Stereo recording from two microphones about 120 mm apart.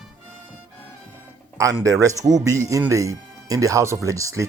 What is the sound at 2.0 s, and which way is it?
Speech, 30° right (ahead or behind).